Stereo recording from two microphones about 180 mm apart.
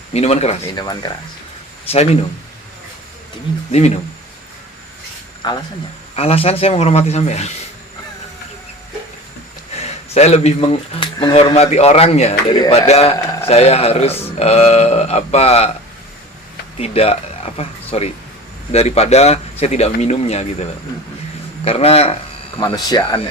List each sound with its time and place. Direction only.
0.1 s speech: 35° left (ahead or behind)
0.8 s speech: 25° left (ahead or behind)
3.7 s speech: 35° left (ahead or behind)
5.4 s speech: 25° left (ahead or behind)
9.7 s speech: 35° left (ahead or behind)
13.1 s a sound: 20° left (ahead or behind)
13.5 s speech: 35° left (ahead or behind)
16.7 s speech: 35° left (ahead or behind)
22.5 s speech: 25° left (ahead or behind)